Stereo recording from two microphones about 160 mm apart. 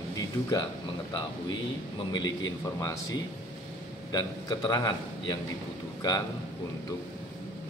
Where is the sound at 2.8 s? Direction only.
20° left (ahead or behind).